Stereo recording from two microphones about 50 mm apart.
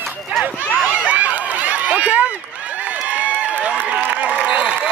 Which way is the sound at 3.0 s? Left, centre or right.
Right.